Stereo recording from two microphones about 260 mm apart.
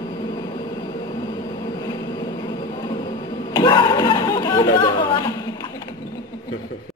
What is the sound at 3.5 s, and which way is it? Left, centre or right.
Chatter, centre.